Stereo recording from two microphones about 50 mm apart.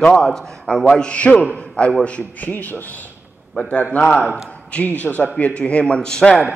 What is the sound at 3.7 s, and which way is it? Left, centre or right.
Speech, left.